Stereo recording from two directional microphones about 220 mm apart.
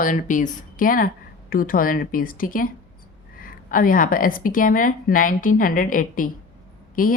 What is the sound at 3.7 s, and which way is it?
A woman's voice, 40° left (ahead or behind).